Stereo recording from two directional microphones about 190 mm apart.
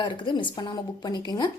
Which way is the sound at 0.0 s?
25° left (ahead or behind).